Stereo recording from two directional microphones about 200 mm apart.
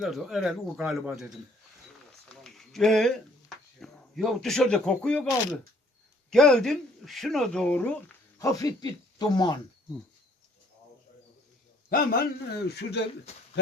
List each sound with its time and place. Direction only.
0.0 s speech: centre (ahead or behind)
2.3 s a sound: centre (ahead or behind)
3.8 s speech: centre (ahead or behind); by 9.6 s 20° left (ahead or behind)
11.9 s a man's voice: 45° left (ahead or behind)